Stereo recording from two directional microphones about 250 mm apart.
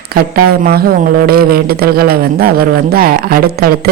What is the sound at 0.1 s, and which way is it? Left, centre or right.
Speech, right.